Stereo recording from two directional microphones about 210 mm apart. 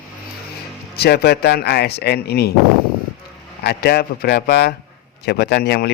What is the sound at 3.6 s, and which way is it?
Speech, 50° left (ahead or behind).